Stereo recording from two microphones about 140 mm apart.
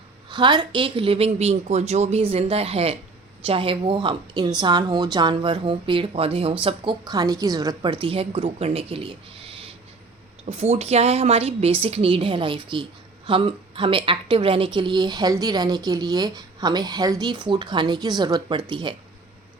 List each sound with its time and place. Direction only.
0.3 s a woman's voice: 35° right (ahead or behind)
10.4 s a woman's voice: 50° right (ahead or behind)